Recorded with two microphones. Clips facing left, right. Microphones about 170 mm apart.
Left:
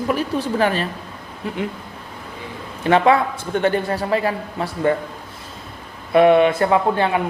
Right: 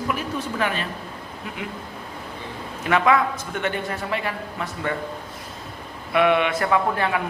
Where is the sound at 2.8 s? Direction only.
30° left (ahead or behind).